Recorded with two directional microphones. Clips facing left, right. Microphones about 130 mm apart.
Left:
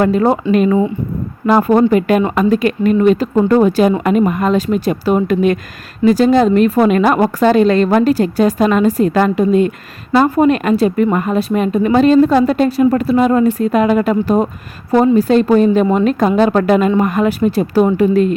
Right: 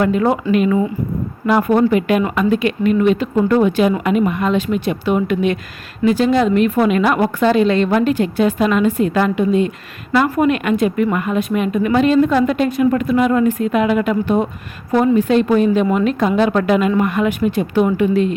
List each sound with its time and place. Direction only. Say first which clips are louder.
0.0 s a woman's voice: left 3 dB; 35° left (ahead or behind)
10.1 s a woman's voice: left 4 dB; 35° left (ahead or behind)